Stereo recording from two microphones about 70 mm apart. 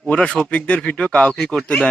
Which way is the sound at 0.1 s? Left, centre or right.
Centre.